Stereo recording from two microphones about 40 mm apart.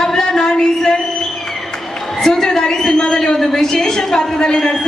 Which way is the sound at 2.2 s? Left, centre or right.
Centre.